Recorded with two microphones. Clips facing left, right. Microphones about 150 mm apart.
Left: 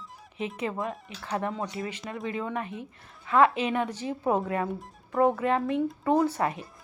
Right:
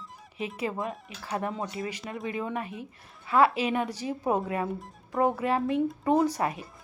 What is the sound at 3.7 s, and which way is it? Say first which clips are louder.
Speech: even; 10° right (ahead or behind).